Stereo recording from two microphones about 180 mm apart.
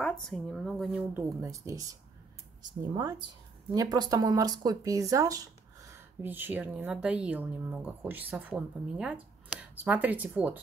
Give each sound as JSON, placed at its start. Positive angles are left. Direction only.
{"t": 0.0, "sound": "speech", "side_deg": 0}
{"t": 1.1, "sound": "speech", "side_deg": -15}